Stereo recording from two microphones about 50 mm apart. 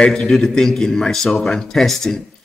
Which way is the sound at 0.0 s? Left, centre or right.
Centre.